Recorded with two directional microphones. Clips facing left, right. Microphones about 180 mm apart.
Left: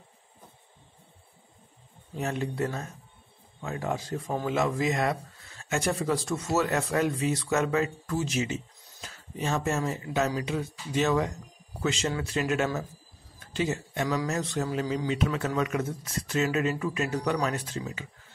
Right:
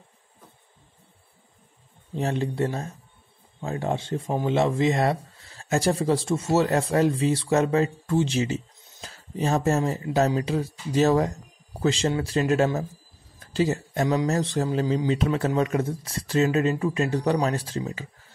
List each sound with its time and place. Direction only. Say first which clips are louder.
2.1 s speech: right 4 dB; 30° right (ahead or behind)